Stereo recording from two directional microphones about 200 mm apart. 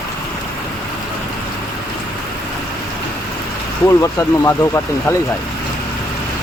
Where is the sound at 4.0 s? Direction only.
15° left (ahead or behind).